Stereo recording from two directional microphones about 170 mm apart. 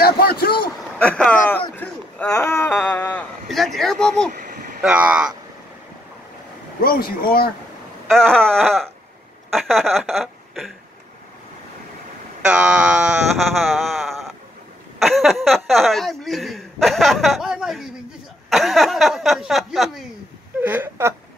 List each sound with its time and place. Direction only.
0.0 s a sound: 65° left (ahead or behind)
0.9 s a sound: 5° left (ahead or behind)
3.4 s speech: centre (ahead or behind)
4.3 s a sound: 50° right (ahead or behind)
4.8 s speech: 5° right (ahead or behind)
6.8 s speech: 60° left (ahead or behind)
8.1 s speech: 5° left (ahead or behind)
12.4 s speech: 5° right (ahead or behind)
20.6 s speech: 10° right (ahead or behind)